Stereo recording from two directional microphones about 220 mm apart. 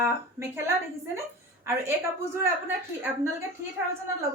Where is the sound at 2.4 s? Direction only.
10° right (ahead or behind).